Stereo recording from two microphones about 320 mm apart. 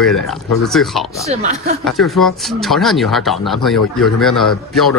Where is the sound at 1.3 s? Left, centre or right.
Right.